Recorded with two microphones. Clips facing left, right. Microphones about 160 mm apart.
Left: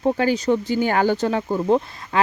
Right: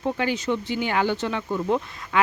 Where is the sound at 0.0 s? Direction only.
40° left (ahead or behind).